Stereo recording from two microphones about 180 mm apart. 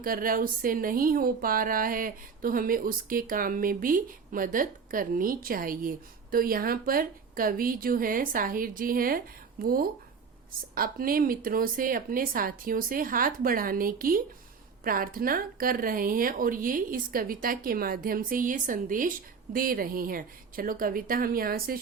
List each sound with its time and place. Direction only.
0.0 s speech: 50° right (ahead or behind)